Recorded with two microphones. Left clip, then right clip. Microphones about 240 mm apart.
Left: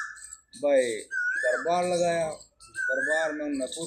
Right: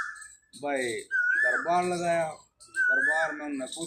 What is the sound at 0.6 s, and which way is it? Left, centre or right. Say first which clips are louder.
Speech: left 7 dB; right.